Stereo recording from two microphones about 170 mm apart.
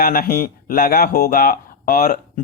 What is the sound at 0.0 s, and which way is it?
Speech, 60° left (ahead or behind).